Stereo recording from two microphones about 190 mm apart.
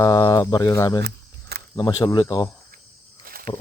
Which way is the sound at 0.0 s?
20° left (ahead or behind).